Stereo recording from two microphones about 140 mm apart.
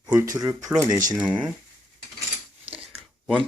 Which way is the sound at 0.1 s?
20° right (ahead or behind).